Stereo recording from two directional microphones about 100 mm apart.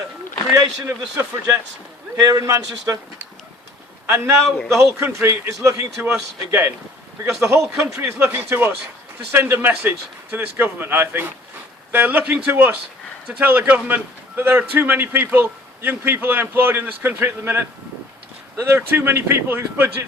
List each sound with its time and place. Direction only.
0.5 s a man's voice: 30° right (ahead or behind)
4.0 s a man's voice: 25° right (ahead or behind)
4.4 s a man's voice: 5° left (ahead or behind)
4.8 s a man's voice: 30° right (ahead or behind)